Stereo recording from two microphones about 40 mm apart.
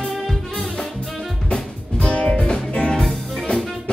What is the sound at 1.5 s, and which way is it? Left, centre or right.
Music, left.